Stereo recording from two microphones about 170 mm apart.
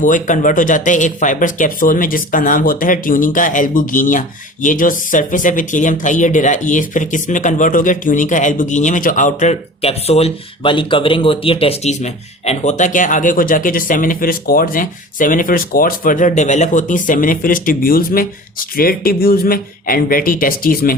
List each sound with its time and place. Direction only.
0.0 s speech: 50° left (ahead or behind)